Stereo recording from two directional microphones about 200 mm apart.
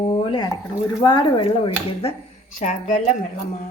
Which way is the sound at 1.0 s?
25° left (ahead or behind).